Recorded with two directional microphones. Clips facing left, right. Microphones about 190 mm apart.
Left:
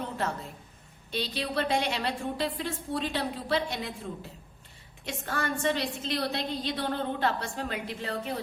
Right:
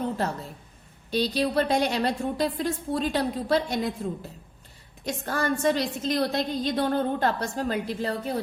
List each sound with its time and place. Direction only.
1.1 s a woman's voice: 40° right (ahead or behind)
5.0 s a woman's voice: 40° right (ahead or behind)